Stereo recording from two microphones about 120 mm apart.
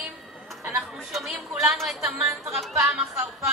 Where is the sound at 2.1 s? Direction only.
20° right (ahead or behind).